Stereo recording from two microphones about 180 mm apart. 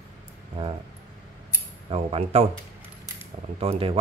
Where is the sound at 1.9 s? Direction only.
35° right (ahead or behind).